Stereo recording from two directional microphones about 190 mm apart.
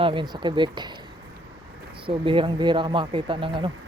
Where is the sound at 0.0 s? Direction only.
25° right (ahead or behind).